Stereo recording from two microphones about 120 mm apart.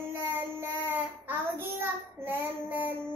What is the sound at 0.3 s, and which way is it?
Child singing, 15° right (ahead or behind).